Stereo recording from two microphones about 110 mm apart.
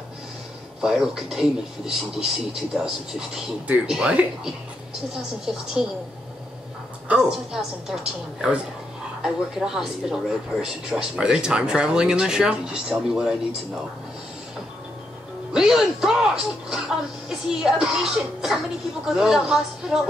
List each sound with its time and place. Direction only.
0.7 s speech: 5° right (ahead or behind)
7.1 s speech: 5° right (ahead or behind)
15.5 s speech: 5° right (ahead or behind)